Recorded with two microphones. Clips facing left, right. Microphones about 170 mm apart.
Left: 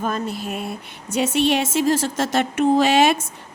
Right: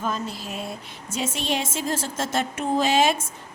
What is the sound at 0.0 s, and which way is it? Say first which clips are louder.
A woman's voice: left 4 dB; 55° left (ahead or behind).